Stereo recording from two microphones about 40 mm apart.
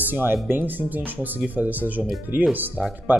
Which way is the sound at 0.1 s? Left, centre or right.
Right.